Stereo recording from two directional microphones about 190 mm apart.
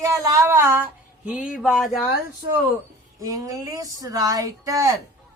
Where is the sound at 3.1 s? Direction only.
15° right (ahead or behind).